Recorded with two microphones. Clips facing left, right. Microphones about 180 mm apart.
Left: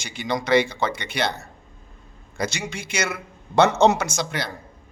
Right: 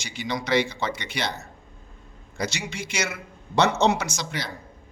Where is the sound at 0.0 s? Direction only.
55° left (ahead or behind).